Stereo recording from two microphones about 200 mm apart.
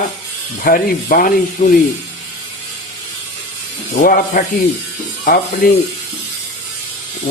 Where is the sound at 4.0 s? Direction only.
45° left (ahead or behind).